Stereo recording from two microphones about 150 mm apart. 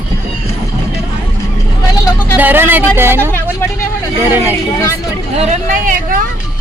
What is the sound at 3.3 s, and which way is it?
Speech, 15° left (ahead or behind).